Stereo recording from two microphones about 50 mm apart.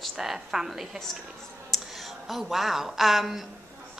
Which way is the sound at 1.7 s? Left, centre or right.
Centre.